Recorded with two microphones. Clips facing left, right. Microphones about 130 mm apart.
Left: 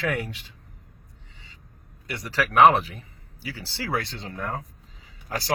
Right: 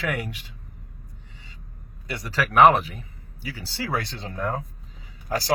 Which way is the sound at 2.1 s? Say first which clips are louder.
Right 1 dB; 20° left (ahead or behind).